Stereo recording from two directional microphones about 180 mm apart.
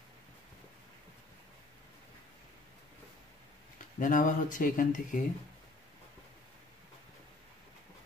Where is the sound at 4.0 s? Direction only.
50° left (ahead or behind).